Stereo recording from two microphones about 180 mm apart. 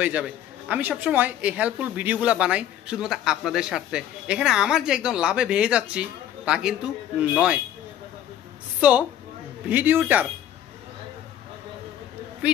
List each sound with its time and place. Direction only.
0.0 s a woman's voice: 5° right (ahead or behind)
9.7 s a man's voice: 10° right (ahead or behind)